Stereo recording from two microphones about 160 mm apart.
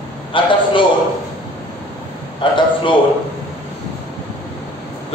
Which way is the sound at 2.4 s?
30° left (ahead or behind).